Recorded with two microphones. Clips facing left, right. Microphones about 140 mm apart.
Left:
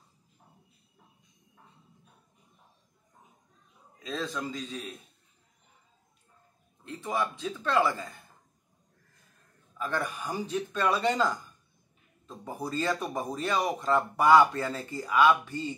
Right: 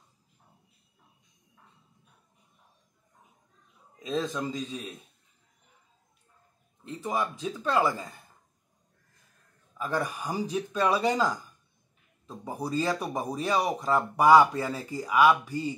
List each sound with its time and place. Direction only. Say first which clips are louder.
4.0 s speech: right 4 dB; 15° right (ahead or behind)
6.8 s speech: right 1 dB; 15° right (ahead or behind)
9.8 s speech: right 2 dB; 15° right (ahead or behind)
12.3 s speech: right 2 dB; 15° right (ahead or behind)